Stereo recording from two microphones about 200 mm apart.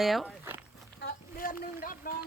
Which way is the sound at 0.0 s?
Centre (ahead or behind).